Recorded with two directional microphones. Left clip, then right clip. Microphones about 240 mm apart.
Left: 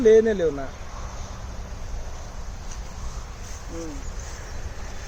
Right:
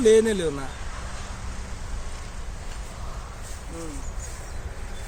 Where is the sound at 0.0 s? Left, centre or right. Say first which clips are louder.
Left 2 dB; right.